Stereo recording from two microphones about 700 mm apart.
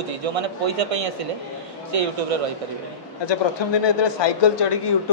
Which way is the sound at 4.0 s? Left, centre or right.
Left.